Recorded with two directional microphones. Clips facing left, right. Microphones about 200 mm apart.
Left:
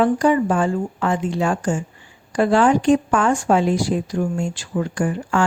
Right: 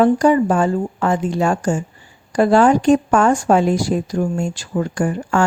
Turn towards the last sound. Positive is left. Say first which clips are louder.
# right 2 dB
turn(degrees=-40)  # may be behind; listen again after turning